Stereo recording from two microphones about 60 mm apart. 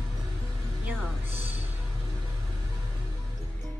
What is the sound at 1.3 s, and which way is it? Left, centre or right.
Music, right.